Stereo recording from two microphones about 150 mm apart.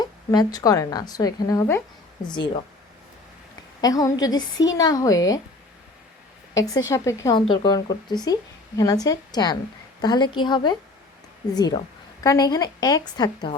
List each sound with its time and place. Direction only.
0.0 s speech: 25° left (ahead or behind)
2.2 s speech: 30° left (ahead or behind)
3.8 s speech: 25° left (ahead or behind)
6.5 s speech: 25° left (ahead or behind)
7.3 s speech: 30° left (ahead or behind)